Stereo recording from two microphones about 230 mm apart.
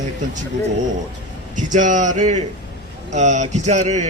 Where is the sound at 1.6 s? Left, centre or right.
Right.